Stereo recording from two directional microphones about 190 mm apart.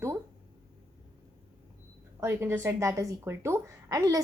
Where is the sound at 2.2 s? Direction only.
15° right (ahead or behind).